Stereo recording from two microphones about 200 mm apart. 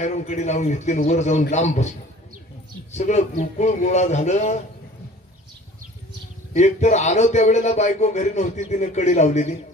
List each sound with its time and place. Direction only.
0.0 s a man's voice: 35° left (ahead or behind)
2.9 s a man's voice: 35° left (ahead or behind)
6.5 s a man's voice: 35° left (ahead or behind)